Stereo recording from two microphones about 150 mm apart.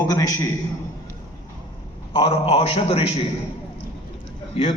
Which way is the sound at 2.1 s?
40° left (ahead or behind).